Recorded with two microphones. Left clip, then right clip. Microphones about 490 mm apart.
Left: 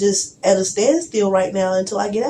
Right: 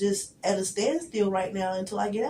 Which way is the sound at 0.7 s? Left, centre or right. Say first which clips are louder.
Left 11 dB; right.